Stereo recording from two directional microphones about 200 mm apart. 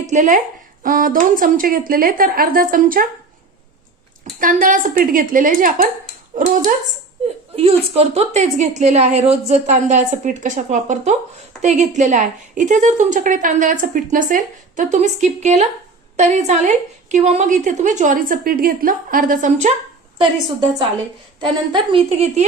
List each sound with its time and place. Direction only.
0.1 s a woman's voice: 40° right (ahead or behind)
4.4 s a woman's voice: 45° right (ahead or behind)
7.5 s a woman's voice: 30° right (ahead or behind)
21.7 s a woman's voice: 30° right (ahead or behind)